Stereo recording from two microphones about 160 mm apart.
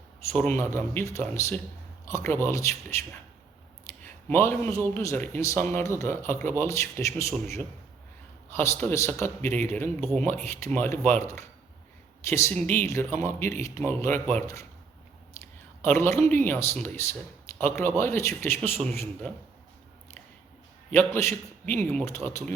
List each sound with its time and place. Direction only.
0.3 s a man's voice: 10° left (ahead or behind)
4.0 s a man's voice: 15° left (ahead or behind)
20.9 s a man's voice: 15° left (ahead or behind)